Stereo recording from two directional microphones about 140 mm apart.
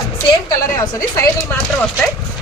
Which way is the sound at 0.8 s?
25° left (ahead or behind).